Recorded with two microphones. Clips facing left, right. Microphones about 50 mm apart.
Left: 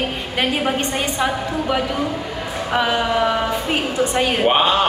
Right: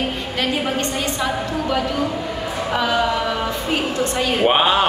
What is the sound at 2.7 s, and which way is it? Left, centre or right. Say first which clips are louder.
Speech: left 1 dB; centre.